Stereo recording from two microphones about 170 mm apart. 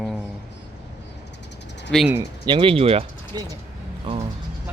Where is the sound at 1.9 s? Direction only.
5° left (ahead or behind).